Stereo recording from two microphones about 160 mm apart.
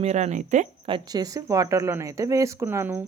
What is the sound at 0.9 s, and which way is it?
Speech, 30° right (ahead or behind).